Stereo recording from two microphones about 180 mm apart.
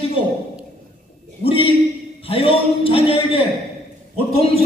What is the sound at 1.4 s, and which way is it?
Speech, 30° left (ahead or behind).